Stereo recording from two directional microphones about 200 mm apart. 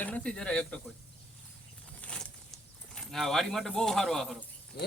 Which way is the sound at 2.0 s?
5° left (ahead or behind).